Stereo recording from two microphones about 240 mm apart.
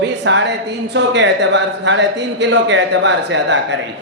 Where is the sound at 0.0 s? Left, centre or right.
Right.